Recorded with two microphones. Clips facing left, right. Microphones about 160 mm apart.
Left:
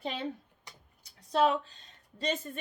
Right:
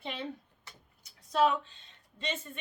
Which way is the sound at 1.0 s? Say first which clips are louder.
Even; 30° left (ahead or behind).